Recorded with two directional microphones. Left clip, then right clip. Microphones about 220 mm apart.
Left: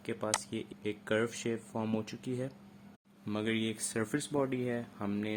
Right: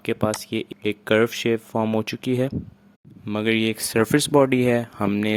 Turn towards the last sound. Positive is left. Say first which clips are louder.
# right 14 dB
turn(degrees=-45)  # may be behind; listen again after turning